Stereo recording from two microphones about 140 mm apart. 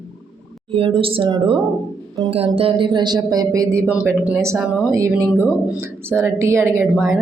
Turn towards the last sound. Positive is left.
turn(degrees=0)  # may be behind; listen again after turning